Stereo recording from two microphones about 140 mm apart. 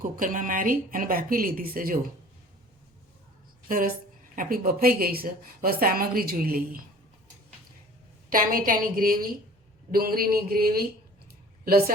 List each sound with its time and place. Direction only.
0.0 s a woman's voice: 70° right (ahead or behind); by 2.0 s 90° right
3.7 s a woman's voice: 80° right
8.3 s a woman's voice: 80° right